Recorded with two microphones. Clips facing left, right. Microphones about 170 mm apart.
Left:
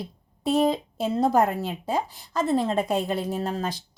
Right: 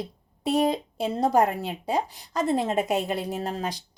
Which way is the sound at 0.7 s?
10° right (ahead or behind).